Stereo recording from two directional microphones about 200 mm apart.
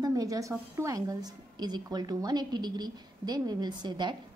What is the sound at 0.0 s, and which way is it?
A woman's voice, 15° right (ahead or behind).